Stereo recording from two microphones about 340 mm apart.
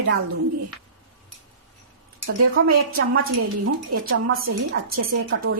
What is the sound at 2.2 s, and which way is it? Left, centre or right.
Speech, right.